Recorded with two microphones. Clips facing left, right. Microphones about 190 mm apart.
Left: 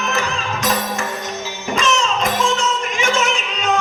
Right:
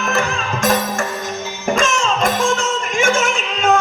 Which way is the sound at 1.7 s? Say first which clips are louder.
Even; 50° right (ahead or behind).